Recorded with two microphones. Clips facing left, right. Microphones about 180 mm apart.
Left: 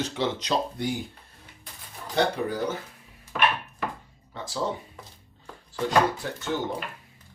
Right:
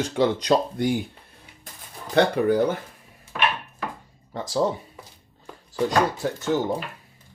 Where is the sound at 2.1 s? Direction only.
60° right (ahead or behind).